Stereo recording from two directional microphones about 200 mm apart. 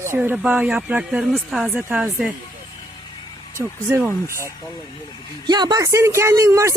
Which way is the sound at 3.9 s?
10° right (ahead or behind).